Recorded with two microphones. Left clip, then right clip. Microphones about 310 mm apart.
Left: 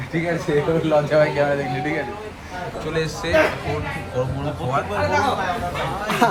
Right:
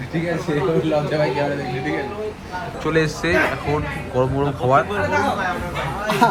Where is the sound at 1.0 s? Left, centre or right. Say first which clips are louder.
Left 3 dB; centre.